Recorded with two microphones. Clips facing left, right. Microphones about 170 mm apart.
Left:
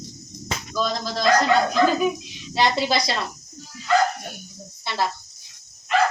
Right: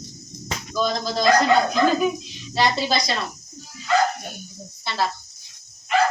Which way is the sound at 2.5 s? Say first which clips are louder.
Even; 20° left (ahead or behind).